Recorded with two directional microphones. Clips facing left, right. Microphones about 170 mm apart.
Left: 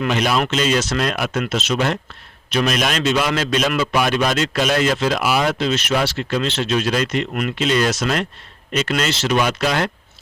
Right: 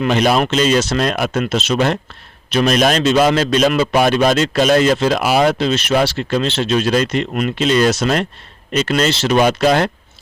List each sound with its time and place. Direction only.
0.0 s a man's voice: 35° right (ahead or behind)